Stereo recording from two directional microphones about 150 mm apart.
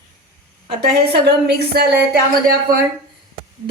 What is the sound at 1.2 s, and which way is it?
Speech, 90° right.